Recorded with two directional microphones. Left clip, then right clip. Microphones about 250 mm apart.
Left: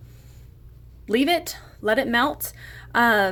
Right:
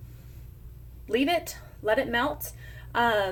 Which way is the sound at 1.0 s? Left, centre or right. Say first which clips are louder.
Left 4 dB; left.